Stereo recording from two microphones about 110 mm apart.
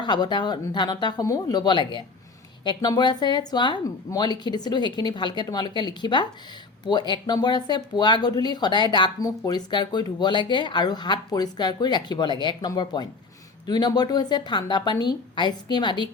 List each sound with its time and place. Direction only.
0.0 s speech: 40° left (ahead or behind)